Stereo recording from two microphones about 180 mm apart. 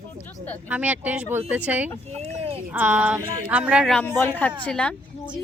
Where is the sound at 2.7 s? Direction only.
10° right (ahead or behind).